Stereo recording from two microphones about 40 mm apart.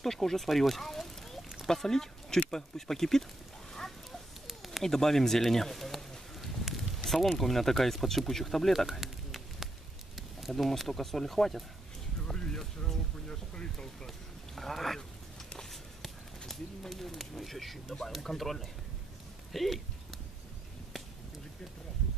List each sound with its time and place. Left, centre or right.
0.0 s speech: centre
3.7 s a sound: centre
4.8 s speech: centre
13.3 s speech: left
14.0 s speech: centre
15.7 s a sound: centre
18.2 s speech: centre